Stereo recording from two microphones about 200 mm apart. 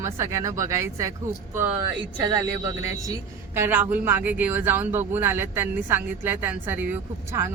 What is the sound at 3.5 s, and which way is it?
Speech, 10° right (ahead or behind).